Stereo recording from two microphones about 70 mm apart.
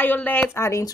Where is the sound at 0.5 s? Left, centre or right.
Left.